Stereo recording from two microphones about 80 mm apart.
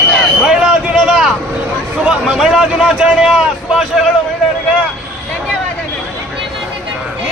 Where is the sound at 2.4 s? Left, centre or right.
Centre.